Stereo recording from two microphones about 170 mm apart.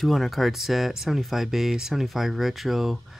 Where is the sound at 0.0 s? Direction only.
Centre (ahead or behind).